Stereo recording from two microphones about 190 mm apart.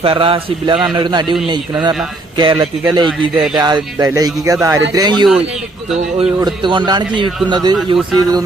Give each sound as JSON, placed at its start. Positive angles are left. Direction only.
{"t": 0.0, "sound": "speech", "side_deg": -30}